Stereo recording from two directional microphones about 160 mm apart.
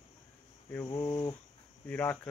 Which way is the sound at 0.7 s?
15° left (ahead or behind).